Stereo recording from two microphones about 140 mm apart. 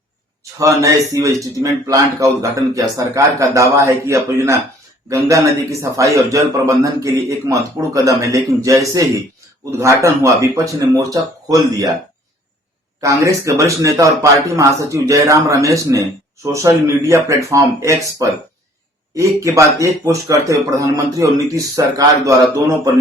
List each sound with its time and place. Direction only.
0.6 s a man's voice: 25° right (ahead or behind)
13.0 s a man's voice: 20° right (ahead or behind)
19.1 s a man's voice: 20° right (ahead or behind)